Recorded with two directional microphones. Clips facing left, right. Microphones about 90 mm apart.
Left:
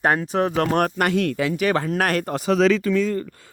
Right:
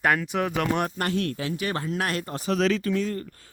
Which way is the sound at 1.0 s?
90° left.